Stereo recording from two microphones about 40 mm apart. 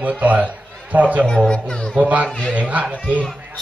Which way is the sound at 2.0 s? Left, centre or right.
Right.